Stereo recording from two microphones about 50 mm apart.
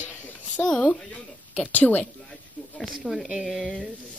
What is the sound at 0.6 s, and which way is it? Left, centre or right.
A woman's voice, centre.